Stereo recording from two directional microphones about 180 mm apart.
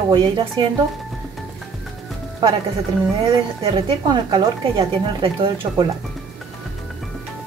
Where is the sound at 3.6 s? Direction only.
30° right (ahead or behind).